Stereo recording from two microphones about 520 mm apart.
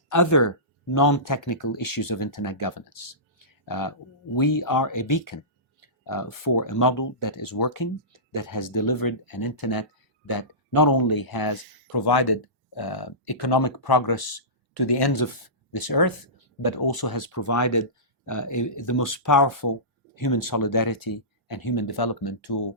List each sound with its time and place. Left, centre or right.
0.1 s speech: left